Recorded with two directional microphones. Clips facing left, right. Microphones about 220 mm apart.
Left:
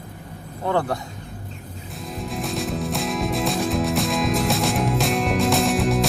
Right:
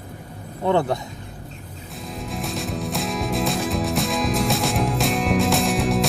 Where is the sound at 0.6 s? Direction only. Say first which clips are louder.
Right 3 dB; 20° right (ahead or behind).